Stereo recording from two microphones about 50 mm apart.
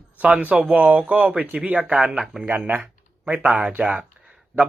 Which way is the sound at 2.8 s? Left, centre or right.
Right.